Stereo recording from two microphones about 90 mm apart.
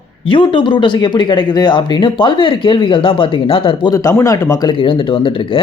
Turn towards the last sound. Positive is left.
turn(degrees=40)  # may be behind; listen again after turning